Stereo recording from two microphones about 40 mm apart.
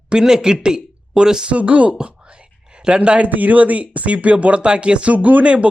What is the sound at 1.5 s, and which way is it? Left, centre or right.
Speech, right.